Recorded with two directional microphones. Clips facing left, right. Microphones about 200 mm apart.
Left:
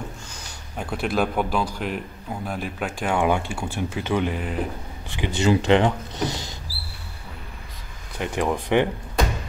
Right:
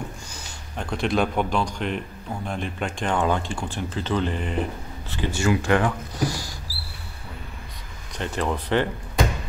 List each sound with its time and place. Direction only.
0.7 s speech: 5° left (ahead or behind)
8.2 s speech: 15° left (ahead or behind)